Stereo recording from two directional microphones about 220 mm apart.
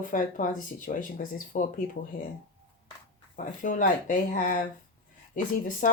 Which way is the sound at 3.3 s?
35° left (ahead or behind).